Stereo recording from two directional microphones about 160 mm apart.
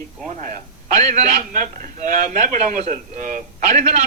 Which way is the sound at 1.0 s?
55° right (ahead or behind).